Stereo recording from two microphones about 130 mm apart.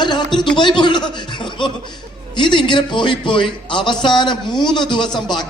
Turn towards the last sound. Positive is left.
turn(degrees=35)  # may be behind; listen again after turning